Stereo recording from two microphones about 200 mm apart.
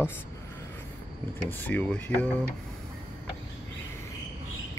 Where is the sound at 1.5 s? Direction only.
10° left (ahead or behind).